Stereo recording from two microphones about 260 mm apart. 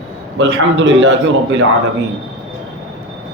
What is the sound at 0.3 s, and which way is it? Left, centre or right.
Speech, right.